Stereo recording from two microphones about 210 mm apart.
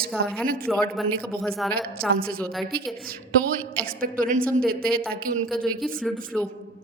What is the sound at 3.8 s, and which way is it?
A woman's voice, 40° right (ahead or behind).